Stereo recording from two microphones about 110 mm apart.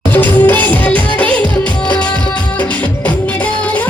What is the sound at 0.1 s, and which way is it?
Music, 15° left (ahead or behind).